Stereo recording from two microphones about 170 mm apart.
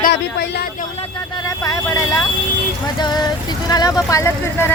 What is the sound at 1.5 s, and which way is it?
Speech, 20° left (ahead or behind).